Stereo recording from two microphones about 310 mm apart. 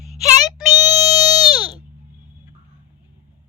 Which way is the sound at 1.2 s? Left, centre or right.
Centre.